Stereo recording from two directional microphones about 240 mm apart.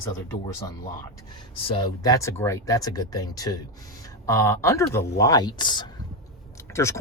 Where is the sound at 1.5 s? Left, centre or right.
Left.